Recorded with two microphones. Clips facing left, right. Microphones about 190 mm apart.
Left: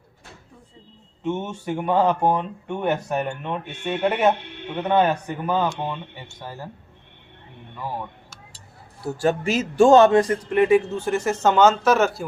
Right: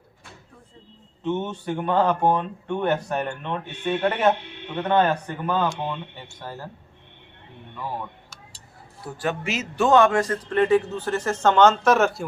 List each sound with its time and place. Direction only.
1.2 s speech: 10° left (ahead or behind)
9.2 s speech: 35° left (ahead or behind); by 12.2 s centre (ahead or behind)